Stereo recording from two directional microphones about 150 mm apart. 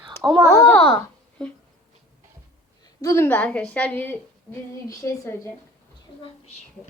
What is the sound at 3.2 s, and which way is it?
A woman's voice, 10° left (ahead or behind).